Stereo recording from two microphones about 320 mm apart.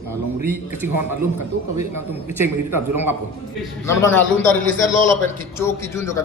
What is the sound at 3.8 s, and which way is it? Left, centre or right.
A man's voice, centre.